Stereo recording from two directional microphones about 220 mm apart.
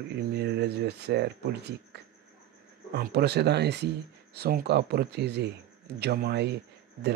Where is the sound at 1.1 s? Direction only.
50° right (ahead or behind).